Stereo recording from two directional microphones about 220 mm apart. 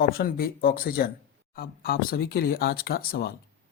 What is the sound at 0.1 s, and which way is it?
Speech, 45° left (ahead or behind).